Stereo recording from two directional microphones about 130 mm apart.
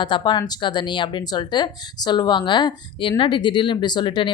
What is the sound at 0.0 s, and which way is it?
Speech, 35° left (ahead or behind).